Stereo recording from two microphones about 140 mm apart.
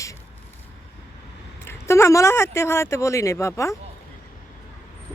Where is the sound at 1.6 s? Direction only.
20° left (ahead or behind).